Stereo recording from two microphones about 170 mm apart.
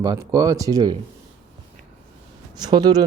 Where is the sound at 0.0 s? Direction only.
20° right (ahead or behind).